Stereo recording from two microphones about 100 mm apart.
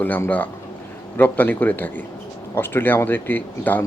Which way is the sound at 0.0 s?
20° left (ahead or behind).